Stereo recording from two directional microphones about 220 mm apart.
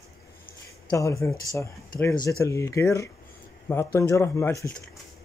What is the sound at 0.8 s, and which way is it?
Speech, 15° left (ahead or behind).